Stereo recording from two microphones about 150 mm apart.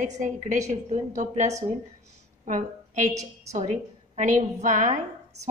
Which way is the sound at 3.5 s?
50° right (ahead or behind).